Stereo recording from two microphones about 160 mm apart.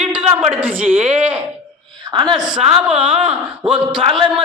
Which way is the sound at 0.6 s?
10° right (ahead or behind).